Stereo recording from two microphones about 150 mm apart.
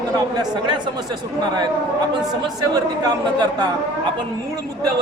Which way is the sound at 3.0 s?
30° right (ahead or behind).